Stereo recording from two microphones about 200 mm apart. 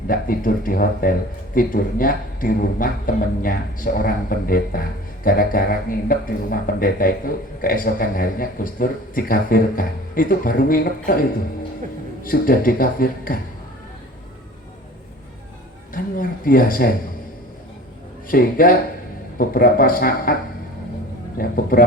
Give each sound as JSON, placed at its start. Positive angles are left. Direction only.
{"t": 0.1, "sound": "speech", "side_deg": 45}
{"t": 15.9, "sound": "speech", "side_deg": 45}
{"t": 18.3, "sound": "speech", "side_deg": 45}
{"t": 21.3, "sound": "speech", "side_deg": 45}